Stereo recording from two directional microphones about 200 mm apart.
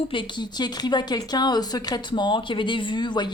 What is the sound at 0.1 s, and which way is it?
Speech, 25° left (ahead or behind).